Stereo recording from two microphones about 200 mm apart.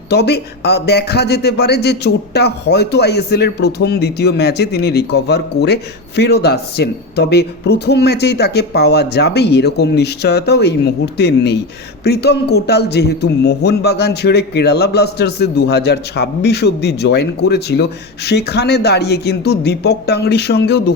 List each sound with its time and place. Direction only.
0.1 s a man's voice: 55° left (ahead or behind)